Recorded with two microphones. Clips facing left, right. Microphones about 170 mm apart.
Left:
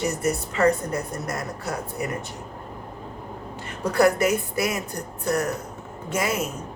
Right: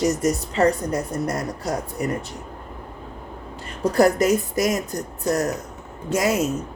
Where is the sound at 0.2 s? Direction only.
35° right (ahead or behind).